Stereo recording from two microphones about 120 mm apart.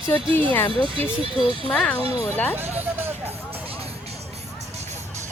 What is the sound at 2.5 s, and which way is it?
Music, 15° right (ahead or behind).